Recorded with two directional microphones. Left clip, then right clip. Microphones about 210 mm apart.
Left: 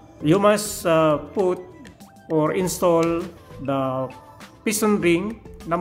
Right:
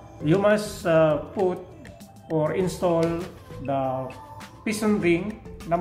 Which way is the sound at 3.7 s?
50° left (ahead or behind).